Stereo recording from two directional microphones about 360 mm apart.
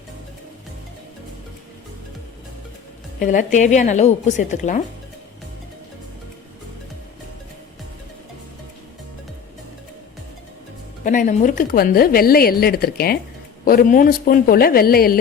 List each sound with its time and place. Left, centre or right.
3.2 s a woman's voice: left
11.0 s a woman's voice: left